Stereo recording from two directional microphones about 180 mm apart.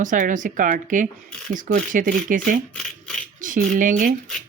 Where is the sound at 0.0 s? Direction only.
45° right (ahead or behind).